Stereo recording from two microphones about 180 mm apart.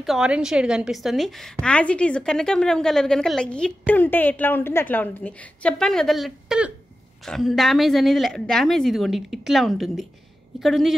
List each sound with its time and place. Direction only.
0.0 s a woman's voice: 5° right (ahead or behind)